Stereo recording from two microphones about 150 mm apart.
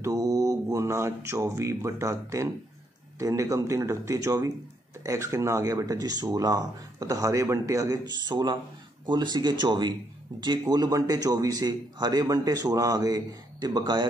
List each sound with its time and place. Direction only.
0.0 s a man's voice: 20° right (ahead or behind)